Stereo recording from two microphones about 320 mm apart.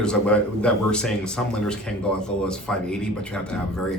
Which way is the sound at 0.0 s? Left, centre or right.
Centre.